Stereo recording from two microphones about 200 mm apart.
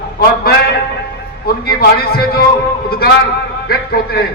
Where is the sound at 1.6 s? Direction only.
50° left (ahead or behind).